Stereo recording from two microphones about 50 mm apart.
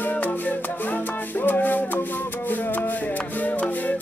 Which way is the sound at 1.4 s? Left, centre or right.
Left.